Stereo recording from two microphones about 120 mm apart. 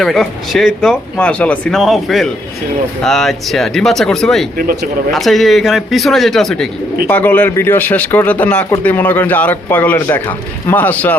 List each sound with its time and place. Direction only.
0.0 s speech: centre (ahead or behind)
7.1 s a man's voice: 15° left (ahead or behind)